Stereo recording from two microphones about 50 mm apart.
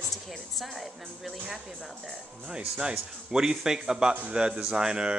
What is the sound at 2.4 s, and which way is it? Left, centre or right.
Speech, centre.